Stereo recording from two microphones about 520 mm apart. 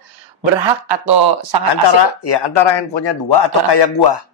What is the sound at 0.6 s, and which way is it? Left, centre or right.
Speech, right.